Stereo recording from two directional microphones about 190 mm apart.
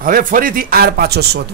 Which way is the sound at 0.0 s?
45° right (ahead or behind).